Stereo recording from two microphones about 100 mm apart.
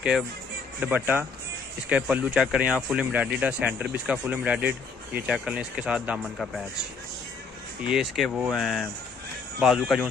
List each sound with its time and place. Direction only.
0.7 s speech: 15° right (ahead or behind)
6.3 s speech: centre (ahead or behind)
7.9 s speech: 5° right (ahead or behind)